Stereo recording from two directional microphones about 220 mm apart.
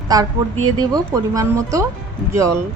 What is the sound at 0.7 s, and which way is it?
A woman's voice, 15° right (ahead or behind).